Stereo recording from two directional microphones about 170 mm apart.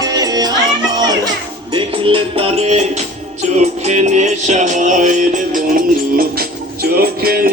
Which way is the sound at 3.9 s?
45° right (ahead or behind).